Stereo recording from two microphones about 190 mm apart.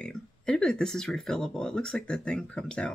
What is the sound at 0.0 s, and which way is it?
Speech, 5° left (ahead or behind).